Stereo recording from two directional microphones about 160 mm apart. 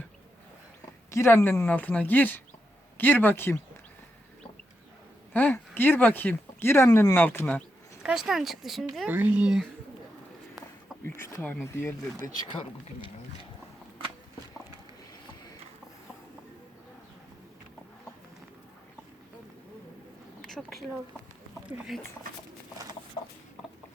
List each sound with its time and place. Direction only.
1.1 s speech: 15° left (ahead or behind)
5.3 s speech: 10° left (ahead or behind)
8.0 s speech: centre (ahead or behind)
9.0 s speech: 10° right (ahead or behind)
11.2 s speech: 20° left (ahead or behind)
20.4 s speech: centre (ahead or behind)